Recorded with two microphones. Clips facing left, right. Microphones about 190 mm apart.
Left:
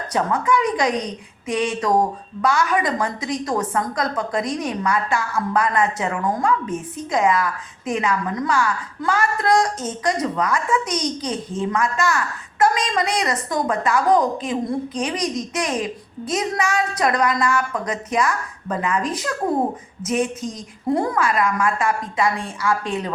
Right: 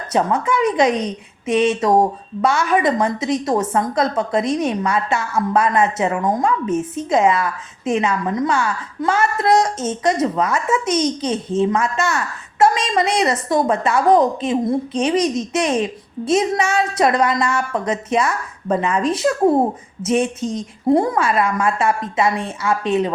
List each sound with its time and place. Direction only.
0.1 s a woman's voice: 25° right (ahead or behind)